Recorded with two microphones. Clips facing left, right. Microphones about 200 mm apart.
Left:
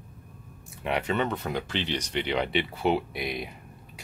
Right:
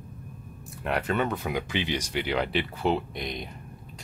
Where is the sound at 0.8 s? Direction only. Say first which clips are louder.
Even; centre (ahead or behind).